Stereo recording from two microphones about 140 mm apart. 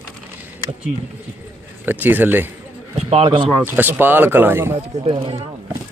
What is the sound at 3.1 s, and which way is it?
Speech, 40° right (ahead or behind).